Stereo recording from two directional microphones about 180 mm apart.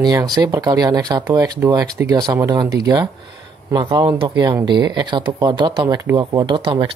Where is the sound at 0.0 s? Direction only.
20° right (ahead or behind).